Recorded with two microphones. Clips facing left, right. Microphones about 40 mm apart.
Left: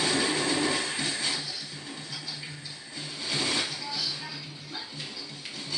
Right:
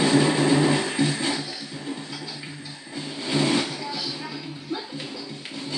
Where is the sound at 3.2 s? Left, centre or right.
Right.